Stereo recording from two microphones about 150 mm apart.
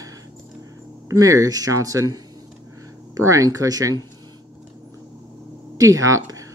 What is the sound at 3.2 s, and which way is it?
Speech, 20° right (ahead or behind).